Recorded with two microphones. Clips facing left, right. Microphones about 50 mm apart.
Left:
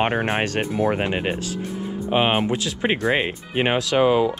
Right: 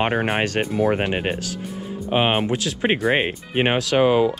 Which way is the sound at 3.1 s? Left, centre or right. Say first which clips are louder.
Right 1 dB; right.